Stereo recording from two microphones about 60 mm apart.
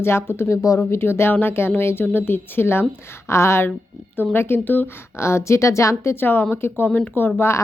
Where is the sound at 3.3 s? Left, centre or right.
Left.